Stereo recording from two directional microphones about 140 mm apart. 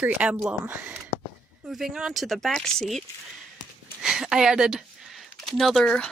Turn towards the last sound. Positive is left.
turn(degrees=5)  # may be behind; listen again after turning